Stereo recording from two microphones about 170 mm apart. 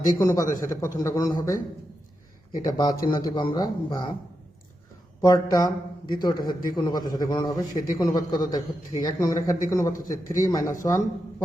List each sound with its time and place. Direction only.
0.0 s a man's voice: 20° left (ahead or behind)
2.6 s a man's voice: 25° left (ahead or behind)
5.2 s a man's voice: 20° left (ahead or behind)